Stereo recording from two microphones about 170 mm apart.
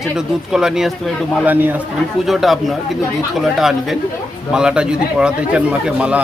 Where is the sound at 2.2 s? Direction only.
Centre (ahead or behind).